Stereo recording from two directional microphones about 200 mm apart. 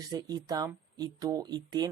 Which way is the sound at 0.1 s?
20° right (ahead or behind).